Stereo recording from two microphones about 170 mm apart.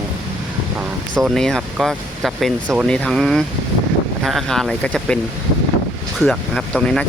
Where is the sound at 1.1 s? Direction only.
5° left (ahead or behind).